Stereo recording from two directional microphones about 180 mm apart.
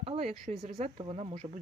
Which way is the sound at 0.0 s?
35° right (ahead or behind).